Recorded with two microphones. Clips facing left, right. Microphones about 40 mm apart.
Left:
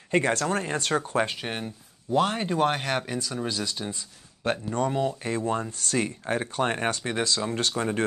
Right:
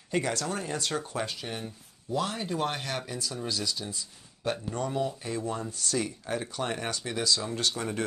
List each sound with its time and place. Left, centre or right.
0.1 s speech: left